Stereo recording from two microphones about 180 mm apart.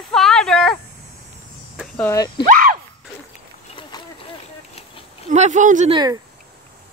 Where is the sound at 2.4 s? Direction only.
50° right (ahead or behind).